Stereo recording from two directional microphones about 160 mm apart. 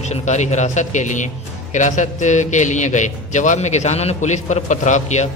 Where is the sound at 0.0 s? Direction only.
45° left (ahead or behind).